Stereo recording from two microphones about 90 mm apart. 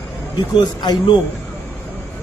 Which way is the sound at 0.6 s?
65° left (ahead or behind).